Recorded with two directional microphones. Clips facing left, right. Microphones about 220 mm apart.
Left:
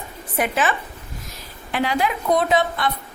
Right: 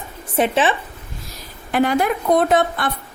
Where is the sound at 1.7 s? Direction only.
50° right (ahead or behind).